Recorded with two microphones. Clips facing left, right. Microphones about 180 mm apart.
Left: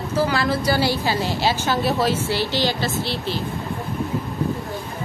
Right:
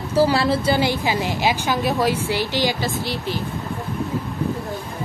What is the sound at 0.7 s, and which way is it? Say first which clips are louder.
A woman's voice: right 1 dB; 15° right (ahead or behind).